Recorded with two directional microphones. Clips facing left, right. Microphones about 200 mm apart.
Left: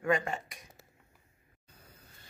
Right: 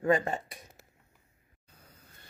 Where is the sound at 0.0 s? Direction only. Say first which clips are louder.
Right 3 dB; 30° right (ahead or behind).